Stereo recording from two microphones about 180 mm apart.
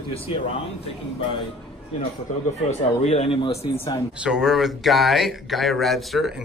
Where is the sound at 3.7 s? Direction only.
20° left (ahead or behind).